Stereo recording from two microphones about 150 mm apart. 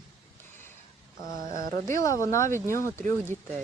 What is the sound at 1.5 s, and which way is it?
Speech, 65° right (ahead or behind).